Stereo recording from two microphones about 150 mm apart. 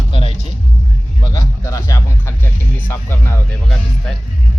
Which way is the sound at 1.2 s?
20° left (ahead or behind).